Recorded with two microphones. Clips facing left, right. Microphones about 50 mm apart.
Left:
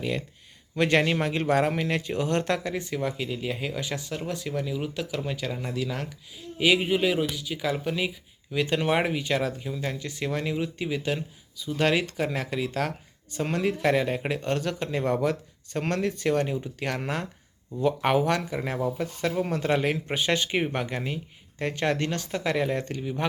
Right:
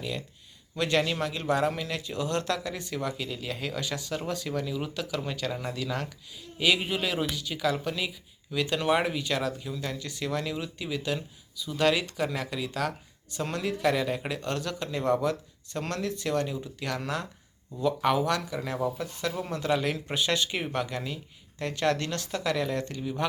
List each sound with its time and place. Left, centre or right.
0.0 s speech: left
2.7 s speech: left
4.1 s speech: centre
7.2 s speech: centre
7.6 s speech: left